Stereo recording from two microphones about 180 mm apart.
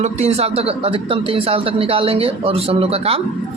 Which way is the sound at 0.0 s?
35° right (ahead or behind).